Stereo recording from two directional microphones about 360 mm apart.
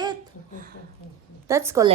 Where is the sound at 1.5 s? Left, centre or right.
Centre.